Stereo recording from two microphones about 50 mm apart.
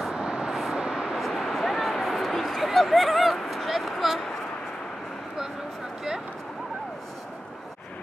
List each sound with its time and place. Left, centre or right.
0.1 s vehicle: centre
0.5 s vehicle: centre
0.7 s vehicle: centre
1.2 s a sound: centre